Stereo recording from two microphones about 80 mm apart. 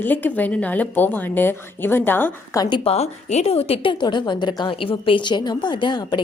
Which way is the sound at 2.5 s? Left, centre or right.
Left.